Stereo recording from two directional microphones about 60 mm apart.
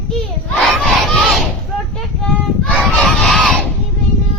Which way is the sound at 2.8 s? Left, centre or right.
Centre.